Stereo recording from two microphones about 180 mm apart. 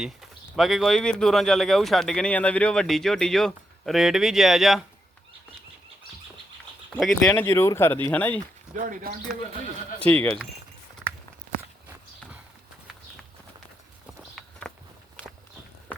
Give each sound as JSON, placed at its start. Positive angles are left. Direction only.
{"t": 0.0, "sound": "speech", "side_deg": 0}
{"t": 6.9, "sound": "speech", "side_deg": 5}
{"t": 8.8, "sound": "speech", "side_deg": -50}
{"t": 10.0, "sound": "speech", "side_deg": 10}
{"t": 14.4, "sound": "walk", "side_deg": 5}